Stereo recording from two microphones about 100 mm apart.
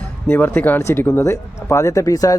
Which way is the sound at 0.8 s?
30° left (ahead or behind).